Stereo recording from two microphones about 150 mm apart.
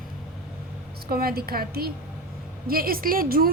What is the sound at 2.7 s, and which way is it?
Speech, 75° right (ahead or behind).